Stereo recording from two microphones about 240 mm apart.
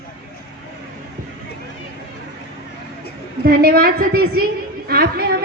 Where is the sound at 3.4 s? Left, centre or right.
Right.